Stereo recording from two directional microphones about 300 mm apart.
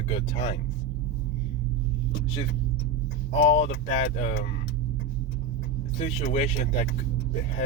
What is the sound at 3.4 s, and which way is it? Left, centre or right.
Speech, left.